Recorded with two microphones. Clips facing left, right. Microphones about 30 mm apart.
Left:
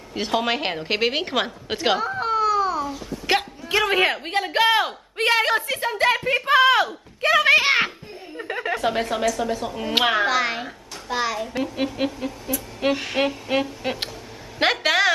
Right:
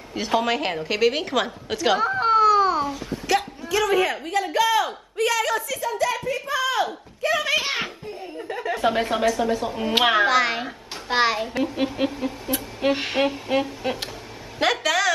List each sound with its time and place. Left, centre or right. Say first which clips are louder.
0.2 s a woman's voice: right 1 dB; left
2.0 s speech: right 3 dB; centre
2.5 s babbling: right 3 dB; right
3.3 s a man's voice: left 1 dB; left
8.4 s a sound: left 2 dB; left
8.7 s a woman's voice: right 2 dB; centre
9.2 s a woman's voice: right 2 dB; centre
9.6 s a woman's voice: right 1 dB; centre
11.1 s a child's voice: right 4 dB; right
11.5 s a woman's voice: right 1 dB; centre
13.2 s speech: even; centre
14.6 s a sound: left 2 dB; left